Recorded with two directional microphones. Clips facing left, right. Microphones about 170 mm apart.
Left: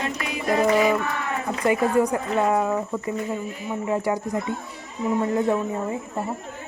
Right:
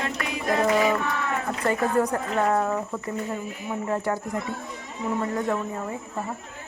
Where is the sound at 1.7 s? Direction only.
10° left (ahead or behind).